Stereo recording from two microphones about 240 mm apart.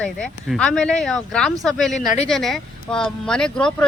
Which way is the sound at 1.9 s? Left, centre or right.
Left.